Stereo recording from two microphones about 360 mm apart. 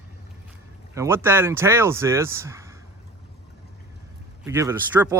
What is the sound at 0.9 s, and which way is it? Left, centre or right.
Speech, centre.